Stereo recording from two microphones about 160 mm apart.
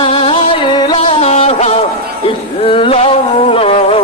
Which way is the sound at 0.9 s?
40° left (ahead or behind).